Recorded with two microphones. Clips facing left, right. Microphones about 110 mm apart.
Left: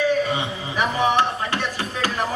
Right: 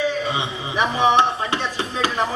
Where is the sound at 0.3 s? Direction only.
20° right (ahead or behind).